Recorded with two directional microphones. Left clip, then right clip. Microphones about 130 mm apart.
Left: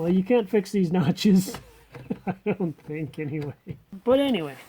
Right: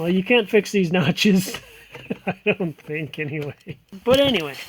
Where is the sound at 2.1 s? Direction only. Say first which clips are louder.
Right 6 dB; 60° right (ahead or behind).